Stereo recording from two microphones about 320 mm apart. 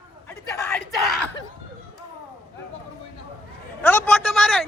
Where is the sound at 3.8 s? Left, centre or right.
Centre.